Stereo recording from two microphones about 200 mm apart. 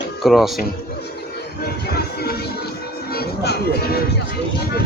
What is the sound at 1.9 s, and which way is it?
Music, 50° left (ahead or behind).